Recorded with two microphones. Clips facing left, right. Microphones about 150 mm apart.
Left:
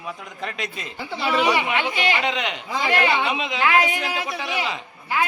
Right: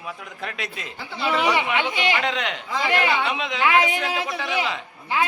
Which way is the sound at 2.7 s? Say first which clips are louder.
Left 1 dB; 20° left (ahead or behind).